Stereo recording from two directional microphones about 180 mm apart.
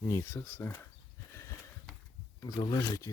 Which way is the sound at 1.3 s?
15° left (ahead or behind).